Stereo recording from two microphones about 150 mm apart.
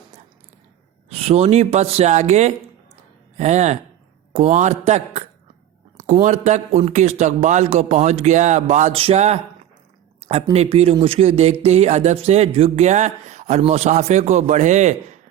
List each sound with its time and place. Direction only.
1.1 s speech: 40° right (ahead or behind)
9.0 s speech: 40° right (ahead or behind)
10.5 s speech: 40° right (ahead or behind)